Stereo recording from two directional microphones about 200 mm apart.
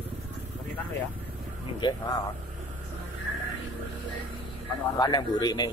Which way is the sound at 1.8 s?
25° left (ahead or behind).